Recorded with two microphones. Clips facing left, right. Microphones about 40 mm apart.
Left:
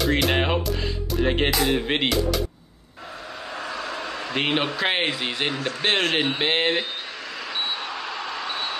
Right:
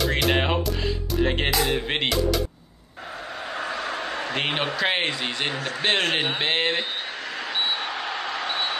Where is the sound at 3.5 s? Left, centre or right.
Right.